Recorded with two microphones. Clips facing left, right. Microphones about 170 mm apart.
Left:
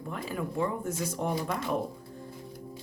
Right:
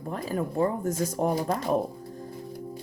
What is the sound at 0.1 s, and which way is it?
Speech, 40° right (ahead or behind).